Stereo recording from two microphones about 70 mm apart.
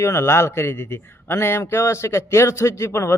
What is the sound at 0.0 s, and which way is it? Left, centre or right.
Speech, left.